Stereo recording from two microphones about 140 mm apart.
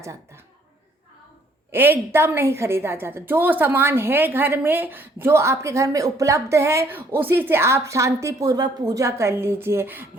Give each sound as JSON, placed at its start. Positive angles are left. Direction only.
{"t": 1.7, "sound": "a woman's voice", "side_deg": -15}